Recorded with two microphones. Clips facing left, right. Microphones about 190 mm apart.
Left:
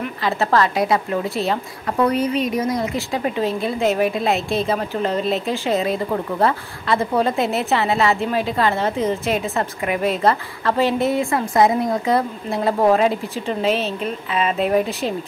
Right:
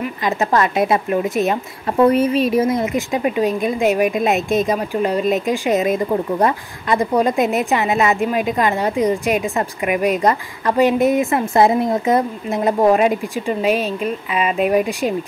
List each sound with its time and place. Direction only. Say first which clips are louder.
0.2 s a woman's voice: right 1 dB; 15° right (ahead or behind)